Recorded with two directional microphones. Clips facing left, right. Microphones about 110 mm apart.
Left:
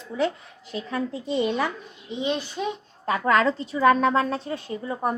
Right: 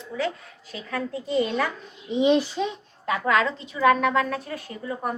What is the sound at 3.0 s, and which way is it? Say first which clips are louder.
A woman's voice: left 2 dB; 40° left (ahead or behind).